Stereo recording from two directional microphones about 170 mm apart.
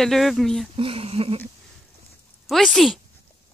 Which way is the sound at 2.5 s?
Centre (ahead or behind).